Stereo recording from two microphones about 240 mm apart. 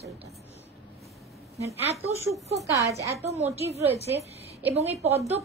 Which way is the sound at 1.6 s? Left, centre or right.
Right.